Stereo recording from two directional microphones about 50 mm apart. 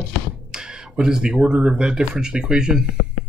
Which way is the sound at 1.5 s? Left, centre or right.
Right.